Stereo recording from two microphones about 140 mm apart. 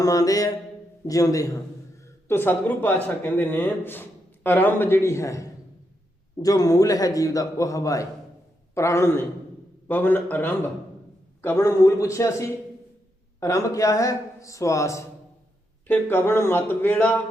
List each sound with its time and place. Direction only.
0.0 s a man's voice: 25° left (ahead or behind)